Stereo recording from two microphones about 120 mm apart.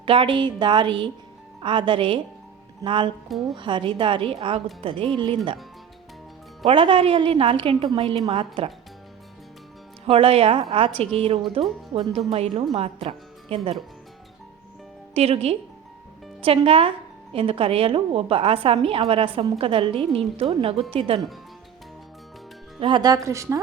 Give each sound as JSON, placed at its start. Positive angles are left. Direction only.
{"t": 0.0, "sound": "a woman's voice", "side_deg": -45}
{"t": 6.7, "sound": "a woman's voice", "side_deg": -50}
{"t": 10.1, "sound": "a woman's voice", "side_deg": -50}
{"t": 15.1, "sound": "a woman's voice", "side_deg": -60}
{"t": 22.8, "sound": "speech", "side_deg": -40}